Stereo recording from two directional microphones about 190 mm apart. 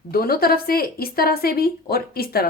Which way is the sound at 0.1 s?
50° left (ahead or behind).